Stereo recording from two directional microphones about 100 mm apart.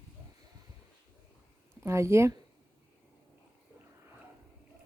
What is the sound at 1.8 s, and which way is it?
Speech, 30° right (ahead or behind).